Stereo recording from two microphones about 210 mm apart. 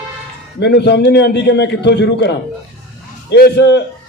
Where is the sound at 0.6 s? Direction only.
55° left (ahead or behind).